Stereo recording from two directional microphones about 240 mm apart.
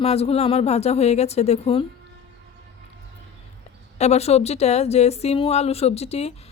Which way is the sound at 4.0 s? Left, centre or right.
Left.